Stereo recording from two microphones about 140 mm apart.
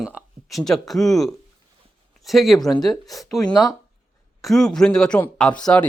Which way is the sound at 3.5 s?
25° left (ahead or behind).